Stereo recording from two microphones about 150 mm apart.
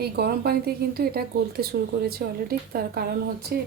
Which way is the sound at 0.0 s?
90° right.